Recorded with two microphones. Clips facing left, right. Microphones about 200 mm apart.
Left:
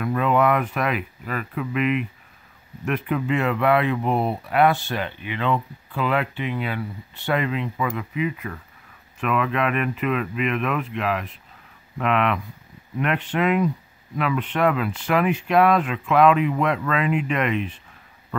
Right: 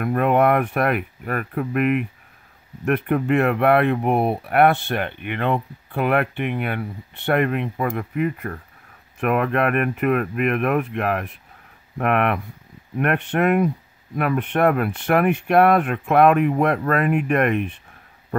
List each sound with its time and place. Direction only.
0.0 s speech: 55° right (ahead or behind)